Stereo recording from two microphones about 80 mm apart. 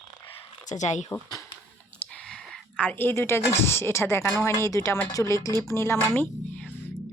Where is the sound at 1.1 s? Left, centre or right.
Left.